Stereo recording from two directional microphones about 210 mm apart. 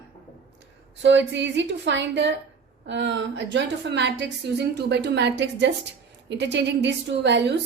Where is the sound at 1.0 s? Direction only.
60° right (ahead or behind).